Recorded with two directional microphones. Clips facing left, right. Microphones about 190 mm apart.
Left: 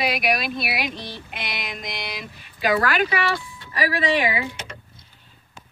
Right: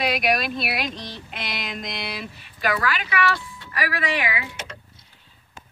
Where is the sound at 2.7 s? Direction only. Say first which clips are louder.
Left 5 dB; 45° left (ahead or behind).